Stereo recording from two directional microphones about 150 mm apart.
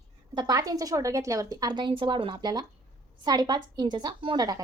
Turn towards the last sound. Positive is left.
turn(degrees=-30)  # may be behind; listen again after turning